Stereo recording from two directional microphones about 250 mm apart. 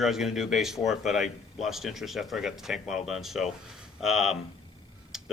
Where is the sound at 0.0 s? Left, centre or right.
Centre.